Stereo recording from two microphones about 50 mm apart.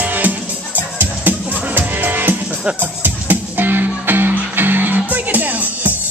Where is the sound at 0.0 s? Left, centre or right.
Right.